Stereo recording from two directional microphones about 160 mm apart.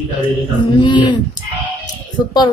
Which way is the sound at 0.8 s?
30° left (ahead or behind).